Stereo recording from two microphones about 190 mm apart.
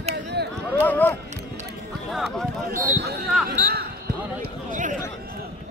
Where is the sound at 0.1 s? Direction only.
60° right (ahead or behind).